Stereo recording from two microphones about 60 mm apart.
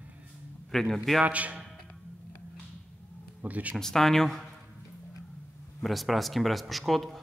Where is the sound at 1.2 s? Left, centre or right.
Right.